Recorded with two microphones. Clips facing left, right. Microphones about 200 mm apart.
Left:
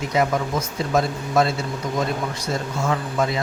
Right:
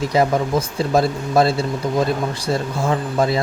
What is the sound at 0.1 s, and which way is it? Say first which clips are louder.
Speech: right 3 dB; 35° right (ahead or behind).